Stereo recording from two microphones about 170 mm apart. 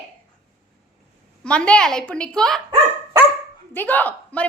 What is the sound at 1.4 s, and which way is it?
A woman's voice, 5° left (ahead or behind).